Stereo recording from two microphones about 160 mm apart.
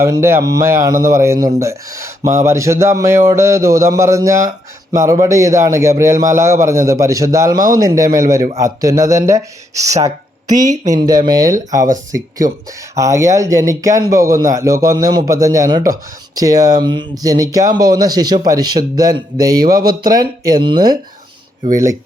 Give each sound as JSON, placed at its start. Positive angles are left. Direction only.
{"t": 0.0, "sound": "speech", "side_deg": -15}
{"t": 13.0, "sound": "speech", "side_deg": -20}